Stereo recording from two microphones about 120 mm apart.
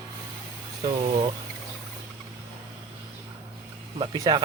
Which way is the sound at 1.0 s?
50° right (ahead or behind).